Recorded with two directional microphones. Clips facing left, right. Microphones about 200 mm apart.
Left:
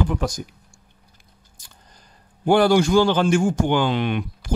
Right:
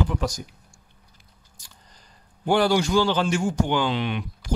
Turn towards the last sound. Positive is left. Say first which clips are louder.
# left 3 dB
turn(degrees=50)  # may be behind; listen again after turning